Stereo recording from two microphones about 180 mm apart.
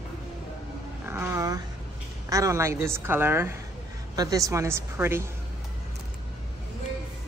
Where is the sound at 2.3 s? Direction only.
15° right (ahead or behind).